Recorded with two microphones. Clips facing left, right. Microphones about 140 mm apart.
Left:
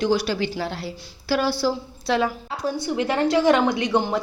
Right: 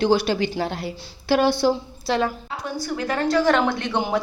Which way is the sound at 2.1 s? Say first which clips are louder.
Even; 5° left (ahead or behind).